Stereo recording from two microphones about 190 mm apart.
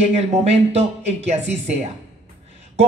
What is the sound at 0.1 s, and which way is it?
A man's voice, 35° right (ahead or behind).